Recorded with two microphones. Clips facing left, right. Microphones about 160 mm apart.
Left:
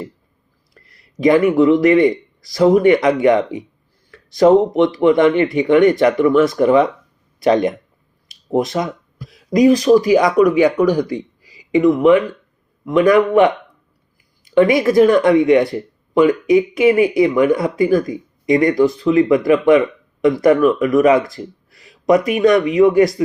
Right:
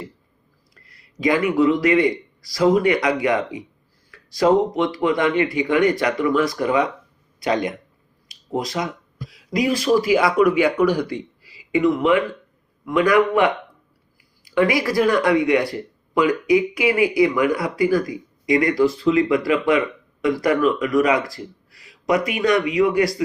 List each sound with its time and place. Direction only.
1.5 s speech: 20° left (ahead or behind)
7.4 s speech: 50° left (ahead or behind)
9.6 s a man's voice: 20° left (ahead or behind)